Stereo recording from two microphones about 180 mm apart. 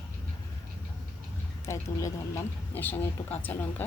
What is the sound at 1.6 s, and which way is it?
A woman's voice, 15° left (ahead or behind).